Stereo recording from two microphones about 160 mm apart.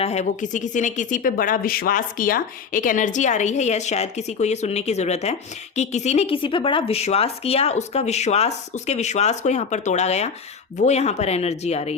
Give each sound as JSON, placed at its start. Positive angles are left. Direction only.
{"t": 0.0, "sound": "speech", "side_deg": 45}